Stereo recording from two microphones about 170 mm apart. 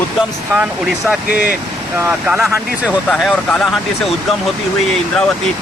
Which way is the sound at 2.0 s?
5° right (ahead or behind).